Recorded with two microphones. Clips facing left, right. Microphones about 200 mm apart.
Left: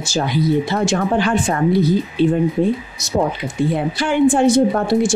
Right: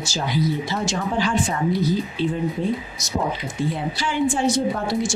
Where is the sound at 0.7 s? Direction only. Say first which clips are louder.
Left 6 dB; 55° left (ahead or behind).